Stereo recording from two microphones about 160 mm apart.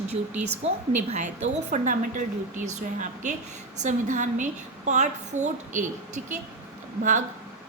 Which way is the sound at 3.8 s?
50° right (ahead or behind).